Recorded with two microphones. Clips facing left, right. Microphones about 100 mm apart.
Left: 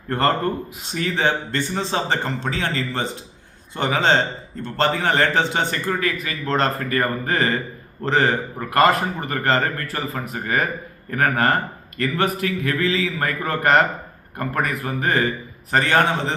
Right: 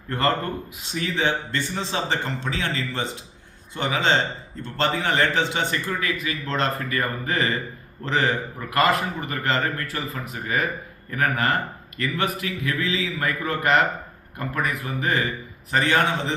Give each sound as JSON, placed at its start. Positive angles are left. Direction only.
{"t": 0.1, "sound": "a man's voice", "side_deg": 40}